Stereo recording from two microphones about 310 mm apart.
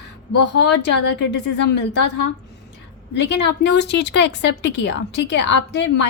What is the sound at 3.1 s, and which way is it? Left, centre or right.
Speech, left.